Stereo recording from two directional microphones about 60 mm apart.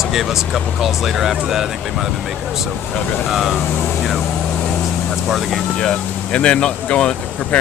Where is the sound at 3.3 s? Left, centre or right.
Centre.